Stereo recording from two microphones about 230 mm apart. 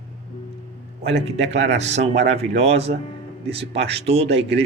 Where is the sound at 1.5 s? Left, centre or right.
Right.